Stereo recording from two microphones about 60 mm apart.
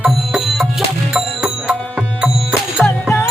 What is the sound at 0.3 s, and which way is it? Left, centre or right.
Music, centre.